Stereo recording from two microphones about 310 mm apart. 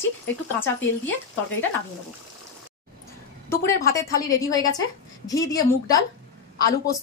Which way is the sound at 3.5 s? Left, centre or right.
Centre.